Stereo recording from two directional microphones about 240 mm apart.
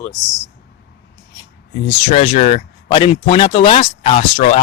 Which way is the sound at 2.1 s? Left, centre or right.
Left.